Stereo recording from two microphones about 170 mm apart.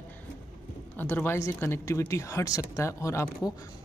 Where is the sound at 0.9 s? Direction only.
10° left (ahead or behind).